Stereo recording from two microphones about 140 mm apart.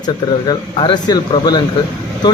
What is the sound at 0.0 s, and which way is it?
Speech, 30° left (ahead or behind).